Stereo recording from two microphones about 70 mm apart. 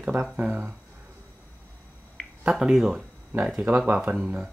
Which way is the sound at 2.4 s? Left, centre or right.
Centre.